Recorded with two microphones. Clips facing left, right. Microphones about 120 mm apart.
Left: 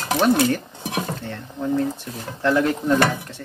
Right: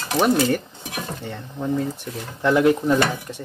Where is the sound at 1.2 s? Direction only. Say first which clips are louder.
Even; 10° right (ahead or behind).